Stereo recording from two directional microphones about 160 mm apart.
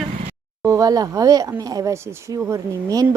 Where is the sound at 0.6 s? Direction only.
20° right (ahead or behind).